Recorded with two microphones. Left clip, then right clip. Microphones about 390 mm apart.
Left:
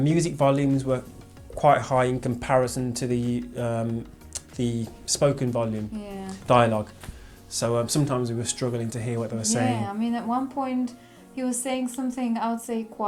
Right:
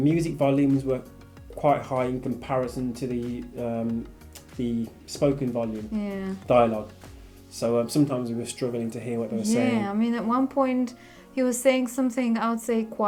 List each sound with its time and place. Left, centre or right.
0.0 s speech: left
6.0 s a woman's voice: right
7.5 s speech: left
9.6 s a woman's voice: right